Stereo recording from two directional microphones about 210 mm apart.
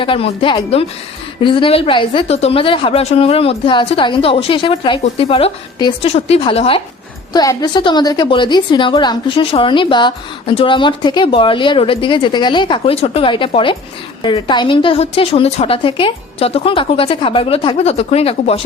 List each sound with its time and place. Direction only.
0.0 s a woman's voice: 25° left (ahead or behind)